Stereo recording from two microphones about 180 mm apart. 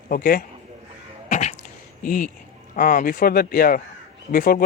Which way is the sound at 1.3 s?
40° left (ahead or behind).